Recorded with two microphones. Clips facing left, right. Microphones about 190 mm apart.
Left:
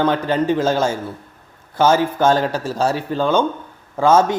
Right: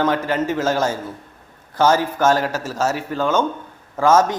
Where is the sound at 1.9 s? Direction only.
25° left (ahead or behind).